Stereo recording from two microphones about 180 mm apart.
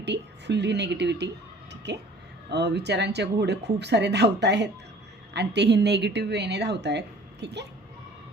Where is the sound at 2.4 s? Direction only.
70° right (ahead or behind).